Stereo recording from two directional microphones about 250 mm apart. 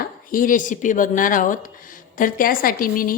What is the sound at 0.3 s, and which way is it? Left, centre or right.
Speech, left.